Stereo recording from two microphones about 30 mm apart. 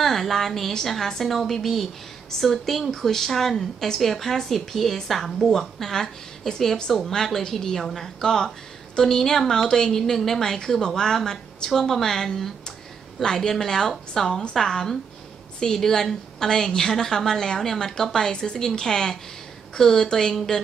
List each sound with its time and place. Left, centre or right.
0.0 s a woman's voice: centre